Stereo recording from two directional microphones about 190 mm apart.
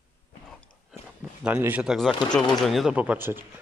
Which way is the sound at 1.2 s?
10° right (ahead or behind).